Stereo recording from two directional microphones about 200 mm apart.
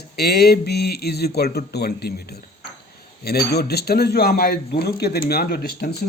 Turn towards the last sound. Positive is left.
turn(degrees=50)  # may be behind; listen again after turning